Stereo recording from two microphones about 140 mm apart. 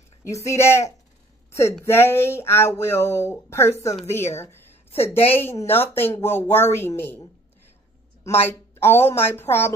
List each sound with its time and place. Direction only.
0.2 s a woman's voice: 20° left (ahead or behind)
4.9 s a woman's voice: 45° left (ahead or behind)
5.6 s a woman's voice: 15° left (ahead or behind)